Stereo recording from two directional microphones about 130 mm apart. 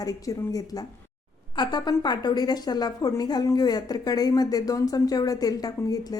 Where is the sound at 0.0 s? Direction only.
25° left (ahead or behind).